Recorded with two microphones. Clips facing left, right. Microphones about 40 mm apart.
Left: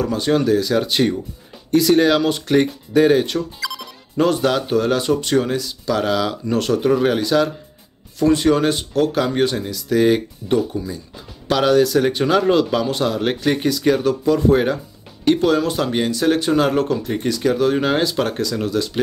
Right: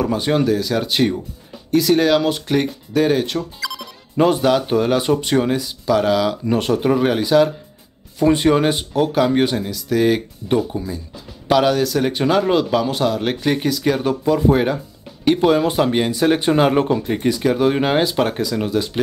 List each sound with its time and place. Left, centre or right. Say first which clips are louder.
0.0 s speech: even; centre
6.4 s speech: even; centre
8.2 s speech: right 1 dB; centre
10.5 s speech: even; centre
11.4 s speech: even; centre